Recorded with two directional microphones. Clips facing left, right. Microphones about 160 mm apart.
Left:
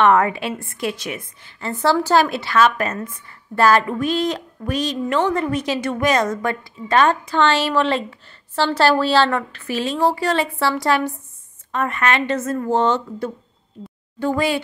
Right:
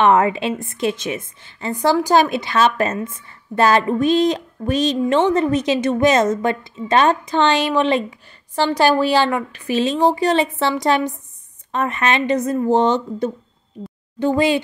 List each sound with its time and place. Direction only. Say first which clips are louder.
0.0 s a woman's voice: right 1 dB; 20° right (ahead or behind)